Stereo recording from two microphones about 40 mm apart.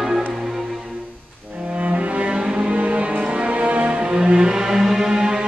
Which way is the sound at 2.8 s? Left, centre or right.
Right.